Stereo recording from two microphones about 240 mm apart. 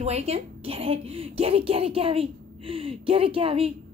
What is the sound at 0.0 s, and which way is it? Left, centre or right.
Speech, right.